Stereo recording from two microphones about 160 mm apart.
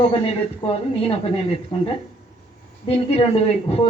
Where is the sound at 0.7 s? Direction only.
35° left (ahead or behind).